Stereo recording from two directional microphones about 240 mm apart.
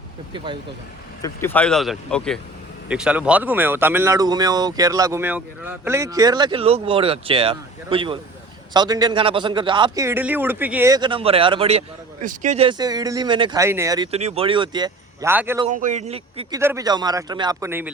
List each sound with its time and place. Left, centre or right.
1.2 s speech: centre
15.6 s speech: right
16.6 s speech: centre